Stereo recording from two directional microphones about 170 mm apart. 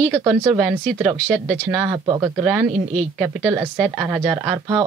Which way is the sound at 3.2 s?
10° right (ahead or behind).